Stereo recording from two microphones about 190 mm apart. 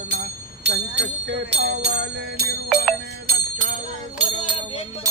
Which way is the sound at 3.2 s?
45° right (ahead or behind).